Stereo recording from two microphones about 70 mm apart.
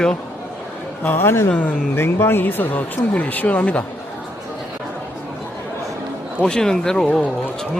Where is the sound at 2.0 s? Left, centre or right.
Left.